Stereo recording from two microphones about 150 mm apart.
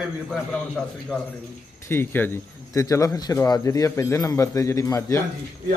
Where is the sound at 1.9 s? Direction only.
15° left (ahead or behind).